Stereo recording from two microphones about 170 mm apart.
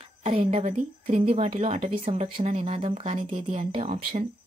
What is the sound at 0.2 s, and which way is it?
Speech, 45° right (ahead or behind).